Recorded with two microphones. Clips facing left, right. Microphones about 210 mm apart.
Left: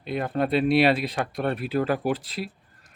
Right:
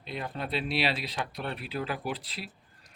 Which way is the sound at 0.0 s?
55° left (ahead or behind).